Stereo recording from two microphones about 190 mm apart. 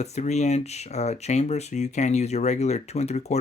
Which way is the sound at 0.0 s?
35° left (ahead or behind).